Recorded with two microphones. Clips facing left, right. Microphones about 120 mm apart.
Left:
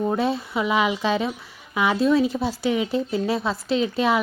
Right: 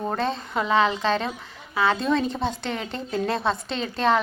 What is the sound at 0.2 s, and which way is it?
A woman's voice, 10° left (ahead or behind).